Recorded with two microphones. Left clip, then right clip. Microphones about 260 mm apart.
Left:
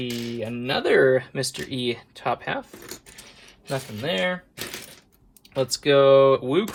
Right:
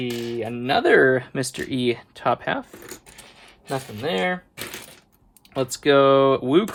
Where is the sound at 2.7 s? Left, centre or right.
Centre.